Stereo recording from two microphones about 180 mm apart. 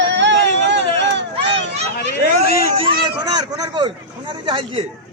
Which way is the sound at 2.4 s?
55° left (ahead or behind).